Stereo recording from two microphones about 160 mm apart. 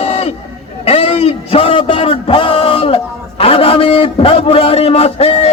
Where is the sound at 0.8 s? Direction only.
35° left (ahead or behind).